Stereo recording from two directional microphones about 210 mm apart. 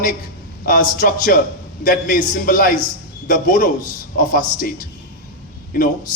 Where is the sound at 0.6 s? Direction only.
40° left (ahead or behind).